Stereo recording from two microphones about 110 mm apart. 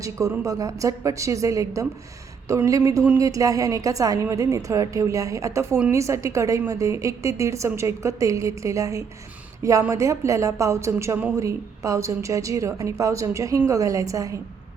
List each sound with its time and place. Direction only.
0.0 s a woman's voice: 30° right (ahead or behind)